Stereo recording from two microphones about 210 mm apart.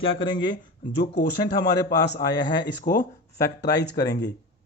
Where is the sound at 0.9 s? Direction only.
55° left (ahead or behind).